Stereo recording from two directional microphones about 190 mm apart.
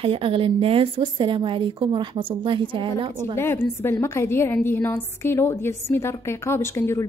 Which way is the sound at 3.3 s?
10° left (ahead or behind).